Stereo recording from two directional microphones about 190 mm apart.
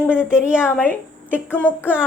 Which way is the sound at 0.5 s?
10° left (ahead or behind).